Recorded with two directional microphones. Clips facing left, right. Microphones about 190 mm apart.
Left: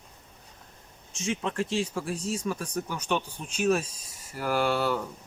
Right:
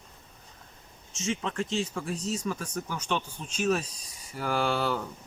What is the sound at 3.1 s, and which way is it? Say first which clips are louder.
Speech: left 2 dB; 15° left (ahead or behind).